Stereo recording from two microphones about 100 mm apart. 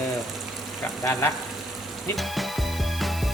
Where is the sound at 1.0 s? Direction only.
25° left (ahead or behind).